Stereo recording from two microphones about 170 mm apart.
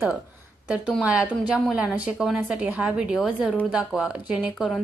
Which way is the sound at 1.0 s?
5° right (ahead or behind).